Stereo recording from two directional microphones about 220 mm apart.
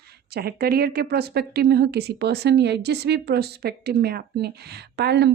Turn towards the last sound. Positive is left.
turn(degrees=-45)  # may be behind; listen again after turning